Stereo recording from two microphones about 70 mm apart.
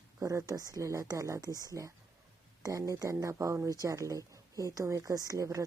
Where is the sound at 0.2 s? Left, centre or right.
Right.